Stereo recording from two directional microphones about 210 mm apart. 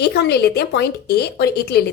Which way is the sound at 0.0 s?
50° left (ahead or behind).